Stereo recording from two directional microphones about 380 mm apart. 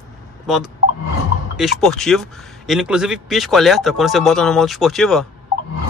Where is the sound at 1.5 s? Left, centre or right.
Centre.